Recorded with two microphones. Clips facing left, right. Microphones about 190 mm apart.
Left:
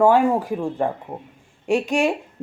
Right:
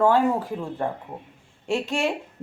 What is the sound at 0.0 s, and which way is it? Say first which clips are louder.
Speech: left 4 dB; 15° left (ahead or behind).